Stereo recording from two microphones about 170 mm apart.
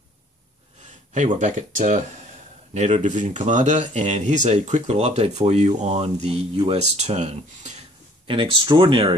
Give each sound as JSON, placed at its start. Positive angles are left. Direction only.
{"t": 1.1, "sound": "speech", "side_deg": -45}
{"t": 8.3, "sound": "speech", "side_deg": -30}